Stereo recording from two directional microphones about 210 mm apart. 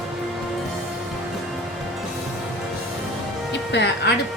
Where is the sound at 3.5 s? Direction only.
55° left (ahead or behind).